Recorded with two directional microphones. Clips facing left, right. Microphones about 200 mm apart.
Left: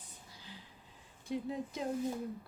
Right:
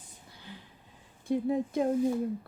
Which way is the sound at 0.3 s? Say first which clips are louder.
Right 6 dB; 60° right (ahead or behind).